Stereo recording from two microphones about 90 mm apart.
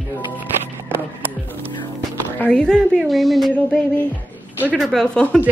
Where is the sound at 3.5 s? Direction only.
15° left (ahead or behind).